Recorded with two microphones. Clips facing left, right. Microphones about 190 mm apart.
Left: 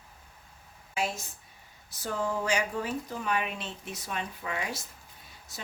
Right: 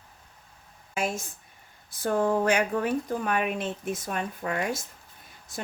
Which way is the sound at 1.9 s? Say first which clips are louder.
Right 7 dB; 55° right (ahead or behind).